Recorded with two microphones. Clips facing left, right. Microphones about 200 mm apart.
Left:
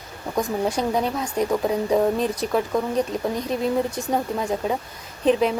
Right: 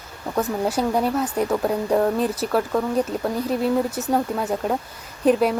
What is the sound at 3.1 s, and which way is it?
A woman's voice, 5° right (ahead or behind).